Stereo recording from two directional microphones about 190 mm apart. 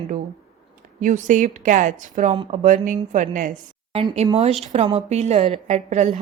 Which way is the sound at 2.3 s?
25° right (ahead or behind).